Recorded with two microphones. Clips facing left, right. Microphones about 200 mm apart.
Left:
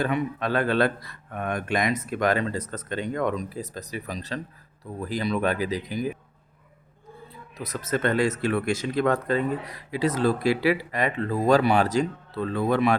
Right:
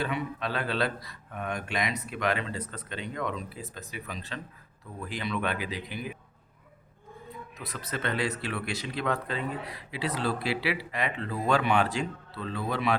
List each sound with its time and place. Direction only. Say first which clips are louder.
0.0 s speech: left 6 dB; 50° left (ahead or behind)
7.6 s speech: left 9 dB; 45° left (ahead or behind)